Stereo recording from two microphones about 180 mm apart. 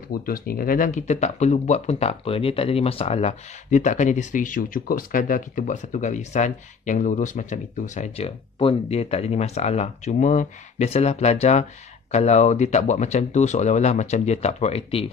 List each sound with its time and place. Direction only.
0.3 s speech: 55° left (ahead or behind); by 15.0 s 35° left (ahead or behind)